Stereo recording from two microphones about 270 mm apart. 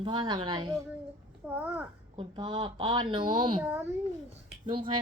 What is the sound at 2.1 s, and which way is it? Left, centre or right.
Speech, centre.